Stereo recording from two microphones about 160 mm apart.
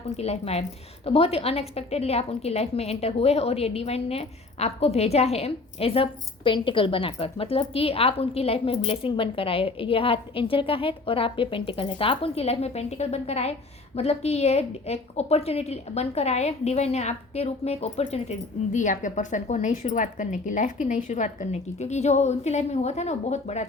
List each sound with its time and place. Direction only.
0.2 s a woman's voice: 40° left (ahead or behind)